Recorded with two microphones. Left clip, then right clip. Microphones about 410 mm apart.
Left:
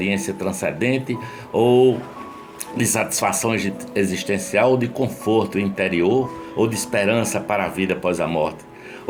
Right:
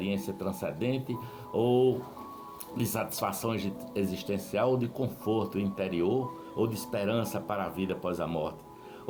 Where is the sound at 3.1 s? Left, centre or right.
Right.